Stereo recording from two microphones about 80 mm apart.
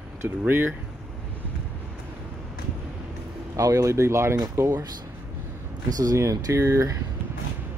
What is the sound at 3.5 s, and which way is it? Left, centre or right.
Speech, right.